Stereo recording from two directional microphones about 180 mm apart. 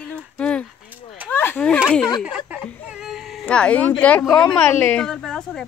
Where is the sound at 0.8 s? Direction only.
10° right (ahead or behind).